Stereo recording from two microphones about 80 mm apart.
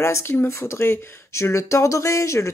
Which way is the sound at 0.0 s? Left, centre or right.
Left.